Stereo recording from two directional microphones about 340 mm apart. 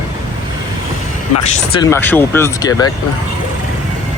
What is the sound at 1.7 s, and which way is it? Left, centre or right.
Speech, centre.